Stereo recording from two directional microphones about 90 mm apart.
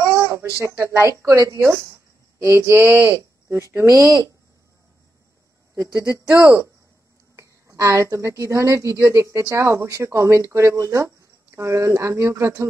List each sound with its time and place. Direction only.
0.2 s a sound: 25° right (ahead or behind)
0.6 s speech: 30° right (ahead or behind)
5.8 s speech: 35° right (ahead or behind)
7.3 s speech: 35° right (ahead or behind)